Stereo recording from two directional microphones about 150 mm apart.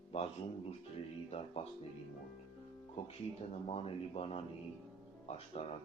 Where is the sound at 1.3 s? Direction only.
40° left (ahead or behind).